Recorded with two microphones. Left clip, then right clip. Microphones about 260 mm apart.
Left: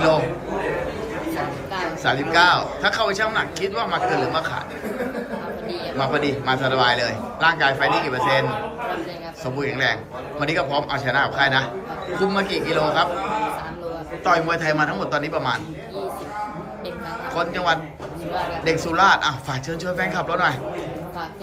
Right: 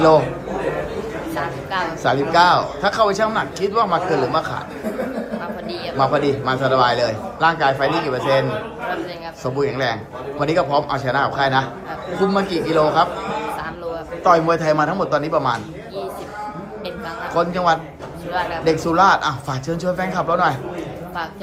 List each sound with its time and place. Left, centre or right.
0.0 s a man's voice: right
2.0 s a man's voice: centre
6.0 s a man's voice: centre
14.3 s a man's voice: centre
17.3 s a man's voice: centre
18.3 s speech: centre
18.6 s a man's voice: centre